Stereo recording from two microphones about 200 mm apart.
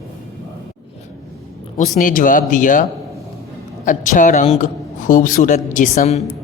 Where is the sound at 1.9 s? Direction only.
40° left (ahead or behind).